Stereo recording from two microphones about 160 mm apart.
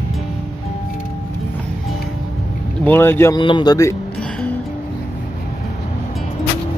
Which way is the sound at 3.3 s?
30° left (ahead or behind).